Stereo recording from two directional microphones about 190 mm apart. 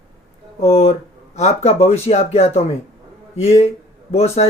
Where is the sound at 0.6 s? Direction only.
35° left (ahead or behind).